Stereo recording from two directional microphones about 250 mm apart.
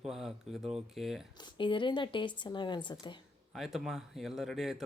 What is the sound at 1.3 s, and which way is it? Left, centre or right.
A woman's voice, centre.